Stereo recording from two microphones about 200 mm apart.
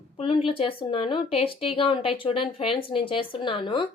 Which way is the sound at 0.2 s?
25° left (ahead or behind).